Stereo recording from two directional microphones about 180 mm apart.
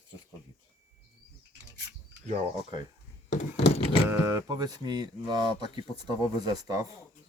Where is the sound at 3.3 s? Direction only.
35° left (ahead or behind).